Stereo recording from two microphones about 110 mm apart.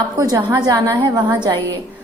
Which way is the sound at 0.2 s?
30° right (ahead or behind).